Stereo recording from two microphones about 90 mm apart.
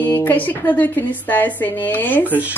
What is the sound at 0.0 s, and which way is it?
Speech, 20° left (ahead or behind).